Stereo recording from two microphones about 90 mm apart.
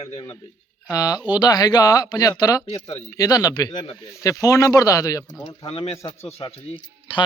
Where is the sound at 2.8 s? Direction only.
90° left.